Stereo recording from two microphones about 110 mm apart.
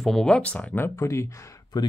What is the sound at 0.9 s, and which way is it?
Speech, 25° left (ahead or behind).